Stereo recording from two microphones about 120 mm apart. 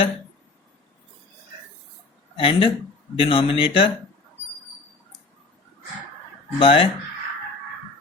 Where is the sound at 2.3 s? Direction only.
50° left (ahead or behind).